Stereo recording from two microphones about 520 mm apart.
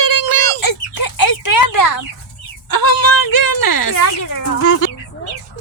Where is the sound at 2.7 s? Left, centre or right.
Left.